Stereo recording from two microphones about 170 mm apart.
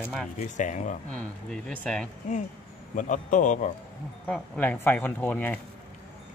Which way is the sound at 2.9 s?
50° left (ahead or behind).